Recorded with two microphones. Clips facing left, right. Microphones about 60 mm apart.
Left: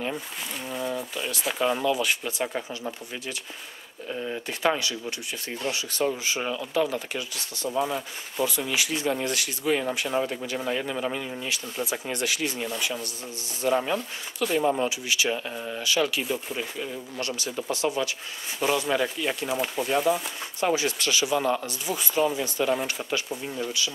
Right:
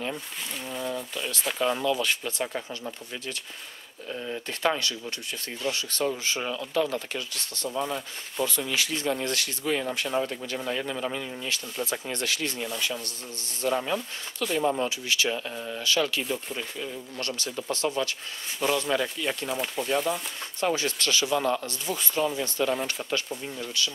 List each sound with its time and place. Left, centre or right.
0.7 s speech: centre
1.9 s speech: centre
16.3 s speech: centre